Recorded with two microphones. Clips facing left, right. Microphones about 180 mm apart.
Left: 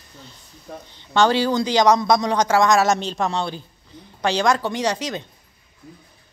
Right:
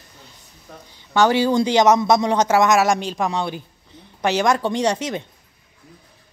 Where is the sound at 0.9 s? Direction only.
15° right (ahead or behind).